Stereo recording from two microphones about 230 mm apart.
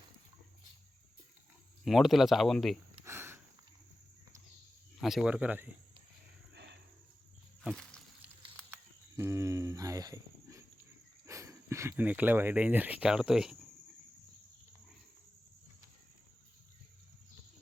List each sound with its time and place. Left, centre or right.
1.8 s speech: centre
3.0 s sniff: centre
4.9 s speech: centre
6.5 s wild animals: right
7.6 s a sound: centre
8.7 s a sound: centre
11.3 s speech: centre